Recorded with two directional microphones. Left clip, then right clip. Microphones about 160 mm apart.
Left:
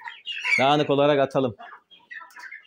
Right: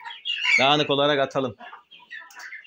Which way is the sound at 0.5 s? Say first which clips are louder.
Even; 30° left (ahead or behind).